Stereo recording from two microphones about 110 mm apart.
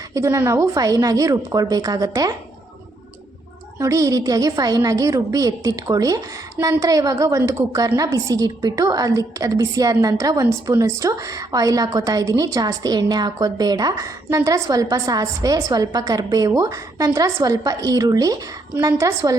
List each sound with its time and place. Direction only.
0.1 s a woman's voice: 30° right (ahead or behind)
3.8 s a woman's voice: 30° right (ahead or behind)